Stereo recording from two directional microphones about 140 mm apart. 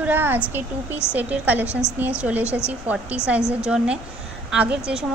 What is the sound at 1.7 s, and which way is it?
Speech, 20° left (ahead or behind).